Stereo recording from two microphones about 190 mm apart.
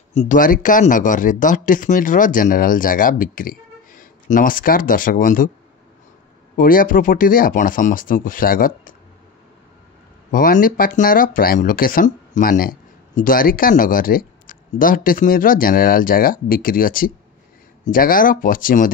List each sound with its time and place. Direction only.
0.1 s speech: 40° left (ahead or behind)
6.5 s speech: 50° left (ahead or behind)
10.3 s speech: 45° left (ahead or behind)